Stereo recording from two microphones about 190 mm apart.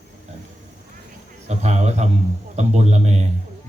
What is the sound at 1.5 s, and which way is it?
A man's voice, 35° right (ahead or behind).